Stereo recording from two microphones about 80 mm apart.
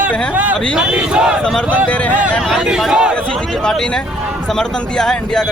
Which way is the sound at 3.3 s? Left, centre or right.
Centre.